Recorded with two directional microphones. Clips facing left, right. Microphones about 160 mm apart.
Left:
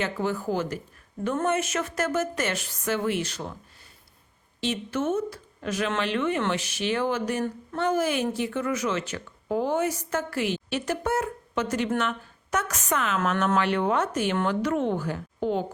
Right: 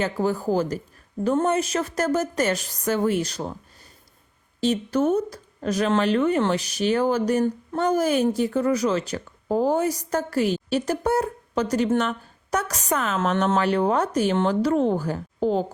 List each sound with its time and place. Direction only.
0.0 s speech: 40° right (ahead or behind)
4.6 s a woman's voice: 40° right (ahead or behind)